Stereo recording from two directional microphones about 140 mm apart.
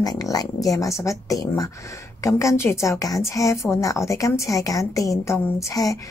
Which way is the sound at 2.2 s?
20° left (ahead or behind).